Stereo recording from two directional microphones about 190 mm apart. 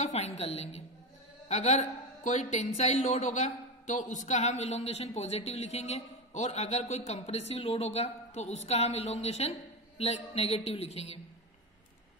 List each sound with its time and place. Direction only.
0.0 s speech: 35° left (ahead or behind)